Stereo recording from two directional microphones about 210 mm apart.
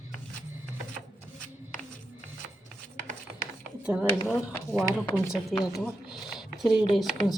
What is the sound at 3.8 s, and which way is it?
Speech, 5° right (ahead or behind).